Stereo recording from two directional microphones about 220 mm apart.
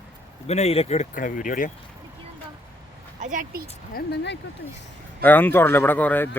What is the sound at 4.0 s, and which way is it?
Speech, 50° left (ahead or behind).